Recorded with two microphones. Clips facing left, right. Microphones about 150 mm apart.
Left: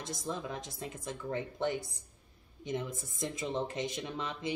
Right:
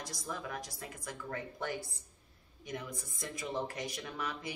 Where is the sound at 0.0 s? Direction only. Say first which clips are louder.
Left 4 dB; 25° left (ahead or behind).